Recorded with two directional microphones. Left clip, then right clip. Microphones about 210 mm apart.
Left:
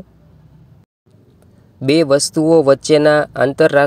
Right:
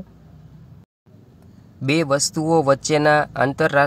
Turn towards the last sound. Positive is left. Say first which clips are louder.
# left 5 dB
turn(degrees=15)  # may be behind; listen again after turning